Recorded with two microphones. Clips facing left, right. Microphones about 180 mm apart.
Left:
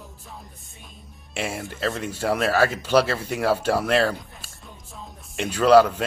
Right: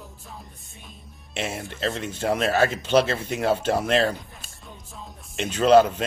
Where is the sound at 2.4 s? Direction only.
20° right (ahead or behind).